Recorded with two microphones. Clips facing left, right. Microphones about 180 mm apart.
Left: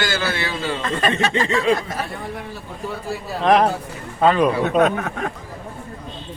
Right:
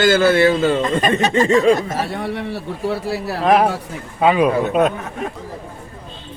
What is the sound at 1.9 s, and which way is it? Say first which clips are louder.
A man's voice: right 6 dB; 85° right.